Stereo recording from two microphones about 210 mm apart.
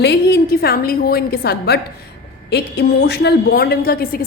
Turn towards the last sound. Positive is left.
turn(degrees=45)  # may be behind; listen again after turning